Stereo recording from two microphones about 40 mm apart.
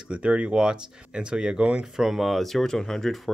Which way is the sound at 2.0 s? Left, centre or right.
Centre.